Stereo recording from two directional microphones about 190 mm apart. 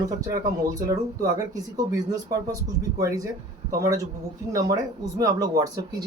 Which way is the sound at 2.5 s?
15° right (ahead or behind).